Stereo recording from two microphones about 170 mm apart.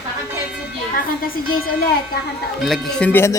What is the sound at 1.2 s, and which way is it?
Speech, 60° left (ahead or behind).